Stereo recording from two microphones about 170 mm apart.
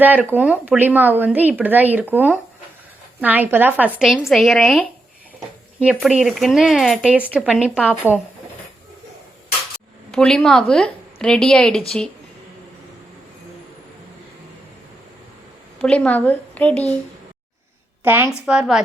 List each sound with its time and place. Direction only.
0.0 s speech: 10° right (ahead or behind)
10.1 s a woman's voice: 5° left (ahead or behind)
15.8 s a woman's voice: 10° left (ahead or behind)
18.0 s speech: 10° right (ahead or behind)